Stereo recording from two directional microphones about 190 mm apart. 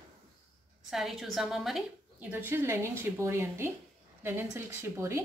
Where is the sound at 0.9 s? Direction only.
Centre (ahead or behind).